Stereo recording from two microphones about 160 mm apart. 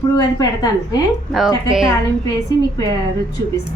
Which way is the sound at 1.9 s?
20° left (ahead or behind).